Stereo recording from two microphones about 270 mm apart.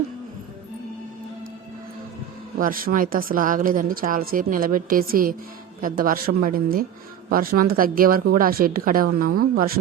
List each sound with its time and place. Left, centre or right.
2.6 s speech: right